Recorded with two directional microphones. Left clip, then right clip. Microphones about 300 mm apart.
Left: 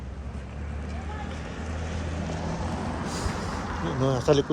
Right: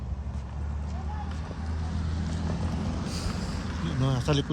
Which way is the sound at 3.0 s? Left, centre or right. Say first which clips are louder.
Left 4 dB; left.